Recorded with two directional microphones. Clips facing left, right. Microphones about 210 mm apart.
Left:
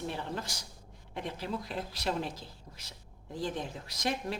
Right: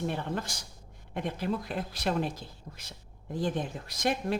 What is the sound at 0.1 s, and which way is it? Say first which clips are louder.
Speech: right 4 dB; 50° right (ahead or behind).